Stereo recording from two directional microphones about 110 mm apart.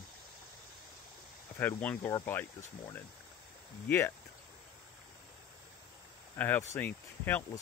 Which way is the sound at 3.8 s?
20° left (ahead or behind).